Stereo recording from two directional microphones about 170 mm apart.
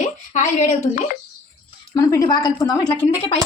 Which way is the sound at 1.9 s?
20° left (ahead or behind).